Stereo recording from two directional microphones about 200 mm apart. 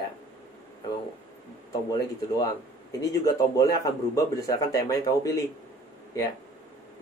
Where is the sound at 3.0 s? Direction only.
15° left (ahead or behind).